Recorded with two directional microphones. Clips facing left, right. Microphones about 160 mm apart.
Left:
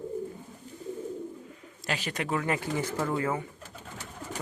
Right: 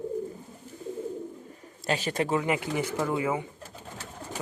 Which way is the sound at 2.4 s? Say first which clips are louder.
Right 2 dB; 20° right (ahead or behind).